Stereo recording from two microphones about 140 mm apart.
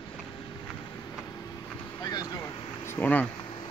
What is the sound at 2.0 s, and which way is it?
Vehicle, 25° left (ahead or behind).